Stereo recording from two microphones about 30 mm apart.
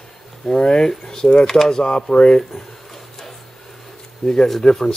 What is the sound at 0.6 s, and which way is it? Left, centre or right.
Speech, left.